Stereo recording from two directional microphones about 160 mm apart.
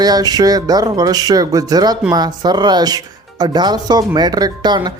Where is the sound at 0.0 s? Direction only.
25° right (ahead or behind).